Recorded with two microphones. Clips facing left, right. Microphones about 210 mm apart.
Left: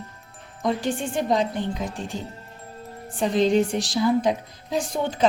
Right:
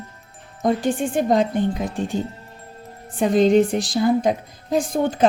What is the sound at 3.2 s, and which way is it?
Speech, 50° right (ahead or behind).